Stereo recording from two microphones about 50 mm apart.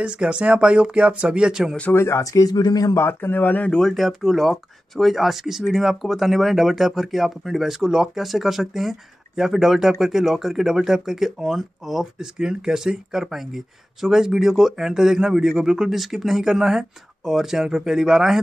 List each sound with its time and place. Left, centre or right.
0.0 s speech: right
1.9 s speech: left
3.1 s speech: left
3.8 s speech: centre